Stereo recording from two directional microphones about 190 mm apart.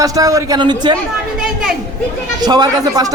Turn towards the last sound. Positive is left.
turn(degrees=-20)  # may be behind; listen again after turning